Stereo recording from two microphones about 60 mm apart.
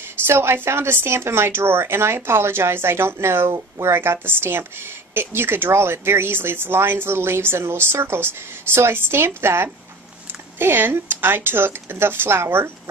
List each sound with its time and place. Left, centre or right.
0.3 s speech: right